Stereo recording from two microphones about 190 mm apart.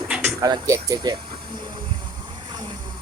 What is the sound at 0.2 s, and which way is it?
Speech, 15° right (ahead or behind).